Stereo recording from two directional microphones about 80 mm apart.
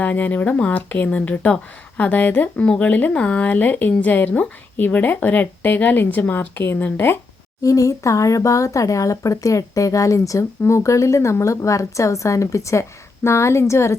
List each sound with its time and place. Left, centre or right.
0.0 s speech: centre
7.6 s speech: left